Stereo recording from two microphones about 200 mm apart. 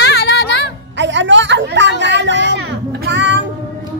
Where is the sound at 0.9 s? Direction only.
65° right (ahead or behind).